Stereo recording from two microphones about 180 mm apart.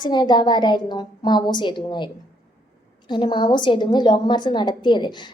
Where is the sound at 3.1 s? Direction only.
25° left (ahead or behind).